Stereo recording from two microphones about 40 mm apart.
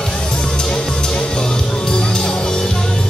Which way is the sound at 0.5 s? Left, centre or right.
Centre.